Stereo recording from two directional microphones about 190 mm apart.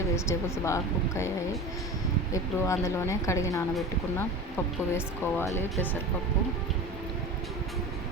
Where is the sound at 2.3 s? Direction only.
15° left (ahead or behind).